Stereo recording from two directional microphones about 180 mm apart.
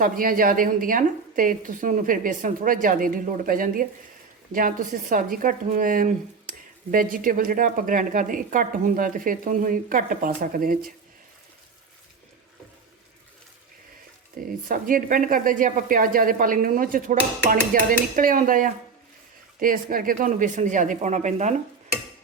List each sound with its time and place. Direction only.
0.0 s a woman's voice: 50° right (ahead or behind)
14.4 s a woman's voice: 50° right (ahead or behind)